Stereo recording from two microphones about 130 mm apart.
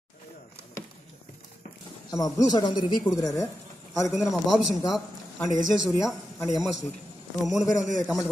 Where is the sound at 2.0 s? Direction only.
30° left (ahead or behind).